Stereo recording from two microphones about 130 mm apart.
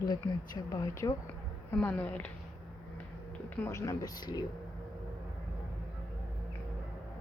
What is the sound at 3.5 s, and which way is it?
Speech, 15° left (ahead or behind).